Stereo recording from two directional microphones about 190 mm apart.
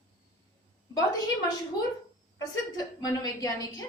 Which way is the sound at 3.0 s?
20° left (ahead or behind).